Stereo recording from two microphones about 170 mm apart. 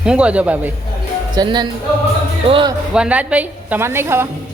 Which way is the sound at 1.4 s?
25° right (ahead or behind).